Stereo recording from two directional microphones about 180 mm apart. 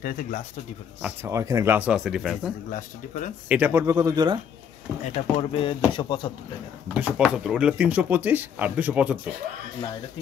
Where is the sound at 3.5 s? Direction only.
10° right (ahead or behind).